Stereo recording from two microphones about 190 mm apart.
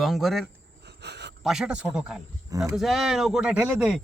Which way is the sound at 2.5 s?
15° right (ahead or behind).